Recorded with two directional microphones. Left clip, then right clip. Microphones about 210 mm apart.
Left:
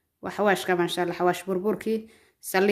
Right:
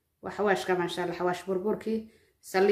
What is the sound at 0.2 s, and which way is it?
Speech, 50° left (ahead or behind).